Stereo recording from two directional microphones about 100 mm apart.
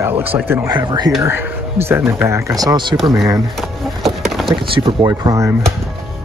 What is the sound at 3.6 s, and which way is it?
Wood, centre (ahead or behind).